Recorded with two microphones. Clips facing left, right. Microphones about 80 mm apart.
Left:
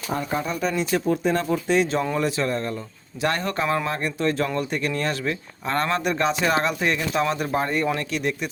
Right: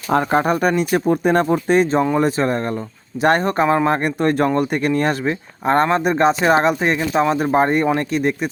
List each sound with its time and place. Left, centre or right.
0.1 s speech: right
3.8 s speech: right